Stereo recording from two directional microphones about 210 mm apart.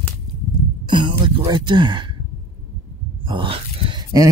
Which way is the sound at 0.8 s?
20° right (ahead or behind).